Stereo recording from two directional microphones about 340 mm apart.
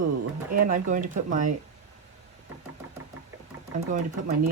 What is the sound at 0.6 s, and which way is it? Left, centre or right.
Speech, right.